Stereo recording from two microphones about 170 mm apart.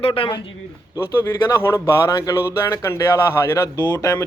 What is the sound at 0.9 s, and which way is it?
Speech, 15° left (ahead or behind).